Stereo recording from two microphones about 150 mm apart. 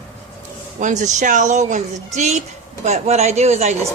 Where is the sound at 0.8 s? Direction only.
55° right (ahead or behind).